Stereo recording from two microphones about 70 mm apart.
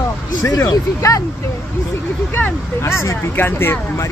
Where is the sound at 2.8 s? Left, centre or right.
Left.